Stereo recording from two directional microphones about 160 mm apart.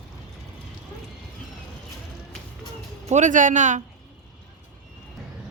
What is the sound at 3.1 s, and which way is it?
Speech, 50° right (ahead or behind).